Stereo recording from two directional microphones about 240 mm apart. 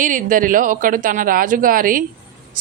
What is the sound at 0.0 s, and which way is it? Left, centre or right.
A woman's voice, right.